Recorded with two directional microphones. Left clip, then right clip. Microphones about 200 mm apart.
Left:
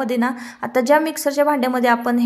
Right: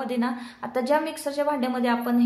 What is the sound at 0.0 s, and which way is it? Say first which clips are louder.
A woman's voice: left 7 dB; 40° left (ahead or behind).